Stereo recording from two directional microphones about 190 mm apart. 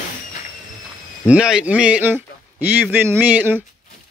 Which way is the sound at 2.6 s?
10° right (ahead or behind).